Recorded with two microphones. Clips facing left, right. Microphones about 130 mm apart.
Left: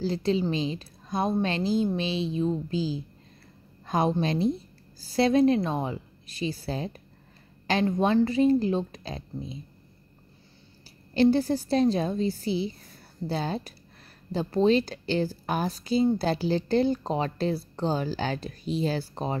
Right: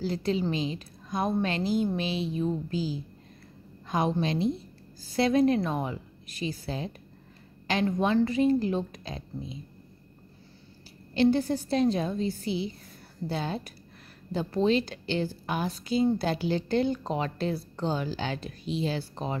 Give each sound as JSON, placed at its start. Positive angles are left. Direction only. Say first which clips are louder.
{"t": 0.0, "sound": "a woman's voice", "louder": "left 2 dB", "side_deg": 30}
{"t": 11.1, "sound": "speech", "louder": "left 2 dB", "side_deg": 35}